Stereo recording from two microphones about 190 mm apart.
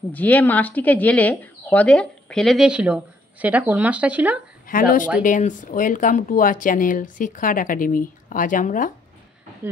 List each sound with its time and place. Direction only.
0.1 s speech: 10° left (ahead or behind); by 4.4 s 5° right (ahead or behind)
4.6 s speech: 45° left (ahead or behind)